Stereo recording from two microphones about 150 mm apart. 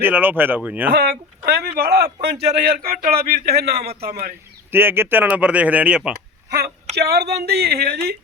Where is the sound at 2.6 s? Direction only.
80° right.